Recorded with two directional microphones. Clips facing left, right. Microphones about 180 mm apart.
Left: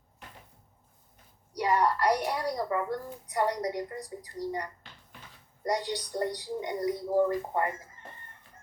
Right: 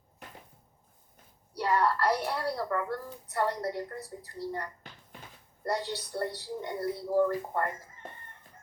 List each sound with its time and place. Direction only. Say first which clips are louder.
1.5 s a child's voice: left 1 dB; 15° left (ahead or behind)